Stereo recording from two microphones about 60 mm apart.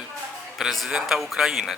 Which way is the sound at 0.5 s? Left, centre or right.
Centre.